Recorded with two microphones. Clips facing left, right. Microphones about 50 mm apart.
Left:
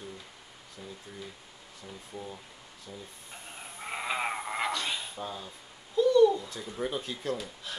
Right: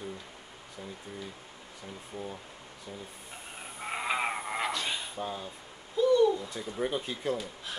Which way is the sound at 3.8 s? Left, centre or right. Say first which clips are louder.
Right 1 dB; centre.